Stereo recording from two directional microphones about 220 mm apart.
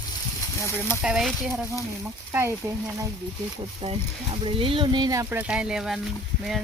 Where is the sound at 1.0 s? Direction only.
5° right (ahead or behind).